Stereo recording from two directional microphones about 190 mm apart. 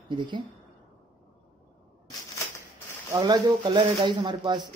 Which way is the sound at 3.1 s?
20° right (ahead or behind).